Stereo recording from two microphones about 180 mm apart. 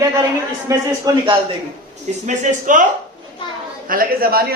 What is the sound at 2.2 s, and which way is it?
Speech, 45° right (ahead or behind).